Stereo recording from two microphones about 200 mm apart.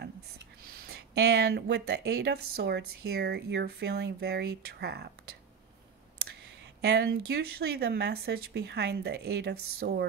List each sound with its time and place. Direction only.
0.8 s speech: 55° right (ahead or behind)
6.8 s speech: 55° right (ahead or behind)